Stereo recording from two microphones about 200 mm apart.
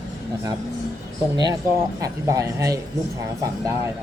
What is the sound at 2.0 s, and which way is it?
Speech, 15° right (ahead or behind).